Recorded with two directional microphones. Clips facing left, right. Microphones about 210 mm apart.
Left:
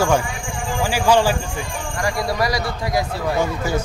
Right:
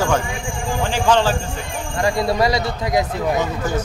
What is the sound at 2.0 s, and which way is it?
Speech, 25° right (ahead or behind).